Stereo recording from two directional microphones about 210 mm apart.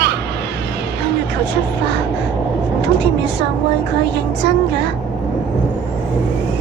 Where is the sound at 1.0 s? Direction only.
55° right (ahead or behind).